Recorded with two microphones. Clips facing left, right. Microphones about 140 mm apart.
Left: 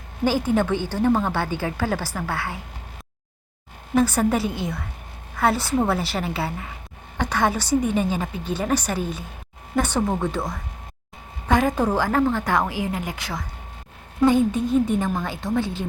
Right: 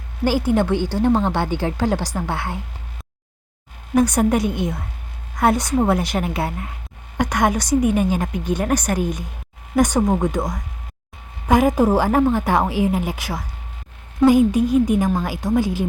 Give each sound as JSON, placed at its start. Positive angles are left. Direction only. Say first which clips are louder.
{"t": 0.3, "sound": "a woman's voice", "louder": "right 3 dB", "side_deg": -10}
{"t": 3.9, "sound": "a woman's voice", "louder": "right 3 dB", "side_deg": -15}
{"t": 14.3, "sound": "speech", "louder": "right 4 dB", "side_deg": 25}
{"t": 14.9, "sound": "a woman's voice", "louder": "right 4 dB", "side_deg": -10}